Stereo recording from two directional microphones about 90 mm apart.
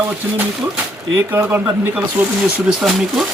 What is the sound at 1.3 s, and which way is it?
Speech, 25° right (ahead or behind).